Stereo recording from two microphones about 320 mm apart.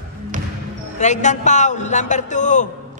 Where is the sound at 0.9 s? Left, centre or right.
Left.